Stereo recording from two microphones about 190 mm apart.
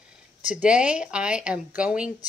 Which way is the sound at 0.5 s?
5° right (ahead or behind).